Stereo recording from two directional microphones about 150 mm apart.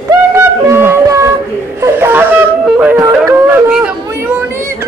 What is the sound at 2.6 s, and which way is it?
Music, 5° right (ahead or behind).